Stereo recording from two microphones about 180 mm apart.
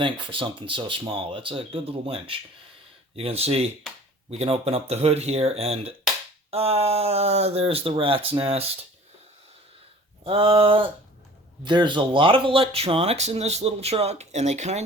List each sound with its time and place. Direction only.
0.0 s speech: 30° right (ahead or behind)
10.2 s speech: 30° right (ahead or behind)